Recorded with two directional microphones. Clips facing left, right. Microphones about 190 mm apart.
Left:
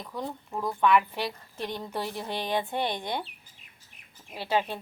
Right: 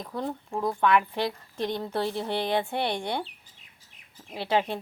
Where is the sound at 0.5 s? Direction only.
10° right (ahead or behind).